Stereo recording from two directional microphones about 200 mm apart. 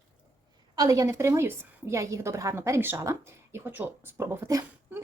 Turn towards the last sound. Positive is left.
turn(degrees=-15)  # may be behind; listen again after turning